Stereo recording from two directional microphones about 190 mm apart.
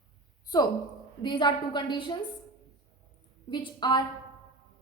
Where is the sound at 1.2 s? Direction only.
25° left (ahead or behind).